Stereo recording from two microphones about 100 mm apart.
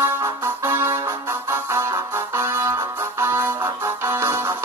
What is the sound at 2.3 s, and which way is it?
Music, 30° right (ahead or behind).